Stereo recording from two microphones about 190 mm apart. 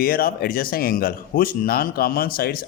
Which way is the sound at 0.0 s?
50° left (ahead or behind).